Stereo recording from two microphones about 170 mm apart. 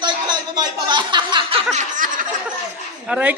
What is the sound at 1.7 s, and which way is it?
Snicker, 50° right (ahead or behind).